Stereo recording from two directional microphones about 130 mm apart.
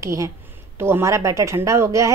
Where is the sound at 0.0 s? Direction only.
25° right (ahead or behind).